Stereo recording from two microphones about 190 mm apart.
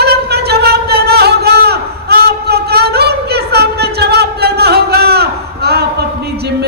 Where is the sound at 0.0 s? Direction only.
60° right (ahead or behind).